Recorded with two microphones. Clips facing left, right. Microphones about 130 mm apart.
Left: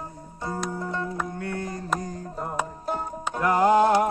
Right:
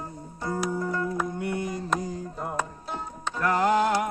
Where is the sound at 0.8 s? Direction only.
25° left (ahead or behind).